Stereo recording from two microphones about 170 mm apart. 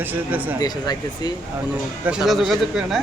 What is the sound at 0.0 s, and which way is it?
Speech, 10° right (ahead or behind).